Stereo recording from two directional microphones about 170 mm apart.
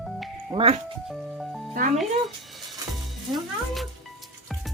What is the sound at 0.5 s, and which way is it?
Speech, 35° right (ahead or behind).